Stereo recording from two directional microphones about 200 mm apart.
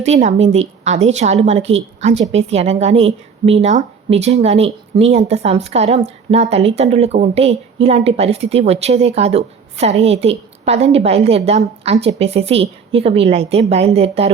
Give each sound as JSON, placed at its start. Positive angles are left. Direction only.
{"t": 0.0, "sound": "a woman's voice", "side_deg": -35}